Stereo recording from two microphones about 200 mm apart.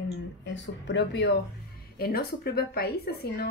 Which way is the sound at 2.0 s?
50° left (ahead or behind).